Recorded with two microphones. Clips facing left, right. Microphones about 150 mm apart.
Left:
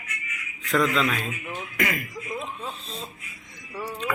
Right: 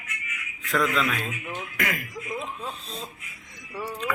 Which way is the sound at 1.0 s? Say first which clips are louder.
Left 2 dB; centre (ahead or behind).